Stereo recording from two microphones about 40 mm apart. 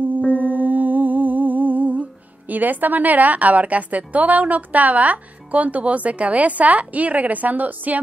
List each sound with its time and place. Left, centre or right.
0.3 s humming: right